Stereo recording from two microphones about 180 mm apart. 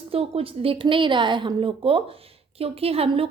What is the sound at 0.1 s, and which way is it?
A woman's voice, 30° right (ahead or behind).